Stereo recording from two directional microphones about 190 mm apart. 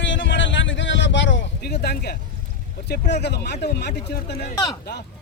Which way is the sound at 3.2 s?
60° left (ahead or behind).